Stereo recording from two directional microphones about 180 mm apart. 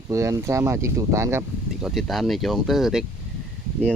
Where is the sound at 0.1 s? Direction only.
15° right (ahead or behind).